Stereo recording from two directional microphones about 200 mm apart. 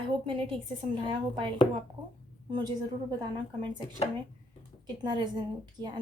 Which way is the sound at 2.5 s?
20° right (ahead or behind).